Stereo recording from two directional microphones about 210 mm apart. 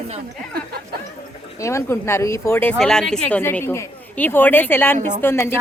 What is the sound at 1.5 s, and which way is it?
Speech, 15° left (ahead or behind).